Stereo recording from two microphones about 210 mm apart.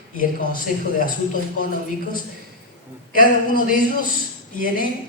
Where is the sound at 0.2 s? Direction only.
40° left (ahead or behind).